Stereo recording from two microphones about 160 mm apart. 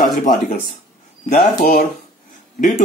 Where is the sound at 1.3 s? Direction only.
55° left (ahead or behind).